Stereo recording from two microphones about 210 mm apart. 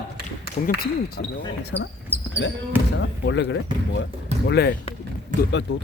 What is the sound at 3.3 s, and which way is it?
Speech, 60° left (ahead or behind).